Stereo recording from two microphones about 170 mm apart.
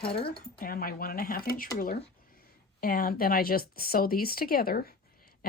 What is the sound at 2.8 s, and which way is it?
Speech, 60° left (ahead or behind).